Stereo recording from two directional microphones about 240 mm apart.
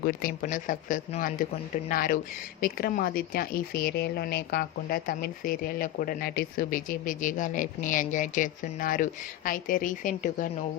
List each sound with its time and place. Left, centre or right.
0.0 s speech: left